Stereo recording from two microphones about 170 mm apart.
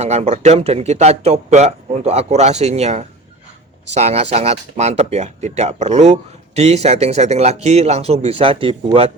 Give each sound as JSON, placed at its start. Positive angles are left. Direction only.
{"t": 0.0, "sound": "speech", "side_deg": -40}